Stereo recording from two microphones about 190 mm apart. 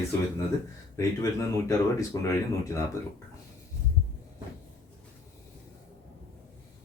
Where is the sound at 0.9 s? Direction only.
15° left (ahead or behind).